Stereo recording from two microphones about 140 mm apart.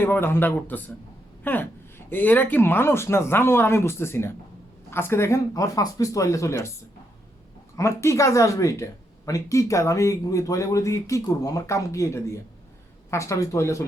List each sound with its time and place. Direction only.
0.0 s speech: 15° left (ahead or behind)
7.8 s speech: 20° left (ahead or behind)